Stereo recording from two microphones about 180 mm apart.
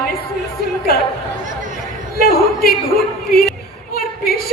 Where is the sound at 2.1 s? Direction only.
55° left (ahead or behind).